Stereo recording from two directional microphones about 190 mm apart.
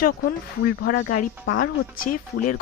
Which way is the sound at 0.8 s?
45° left (ahead or behind).